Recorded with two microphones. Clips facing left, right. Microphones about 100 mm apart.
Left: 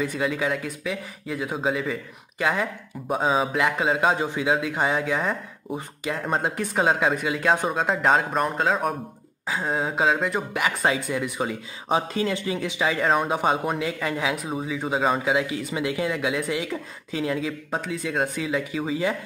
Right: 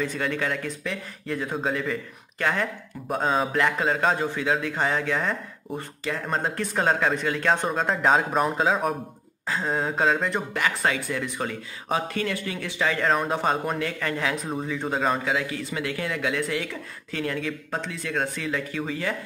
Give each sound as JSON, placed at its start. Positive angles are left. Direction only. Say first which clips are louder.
{"t": 0.0, "sound": "speech", "louder": "left 2 dB", "side_deg": 10}
{"t": 15.3, "sound": "speech", "louder": "left 3 dB", "side_deg": 20}